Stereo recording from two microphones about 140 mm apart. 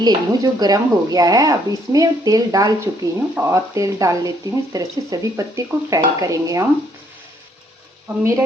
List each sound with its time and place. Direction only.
0.0 s speech: 30° right (ahead or behind)
8.0 s speech: 20° right (ahead or behind)